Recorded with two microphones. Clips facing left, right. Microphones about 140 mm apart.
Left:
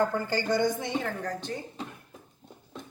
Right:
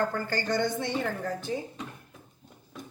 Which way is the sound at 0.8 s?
Centre (ahead or behind).